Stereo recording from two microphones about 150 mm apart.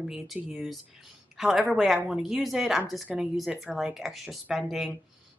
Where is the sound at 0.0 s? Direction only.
5° right (ahead or behind).